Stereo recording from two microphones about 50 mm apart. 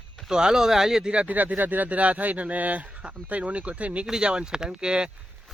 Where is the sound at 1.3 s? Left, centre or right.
Right; by 5.1 s centre.